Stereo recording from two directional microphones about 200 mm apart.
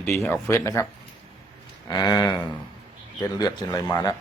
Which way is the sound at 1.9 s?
20° left (ahead or behind).